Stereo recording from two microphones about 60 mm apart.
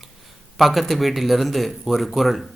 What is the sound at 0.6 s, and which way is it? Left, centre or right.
Speech, centre.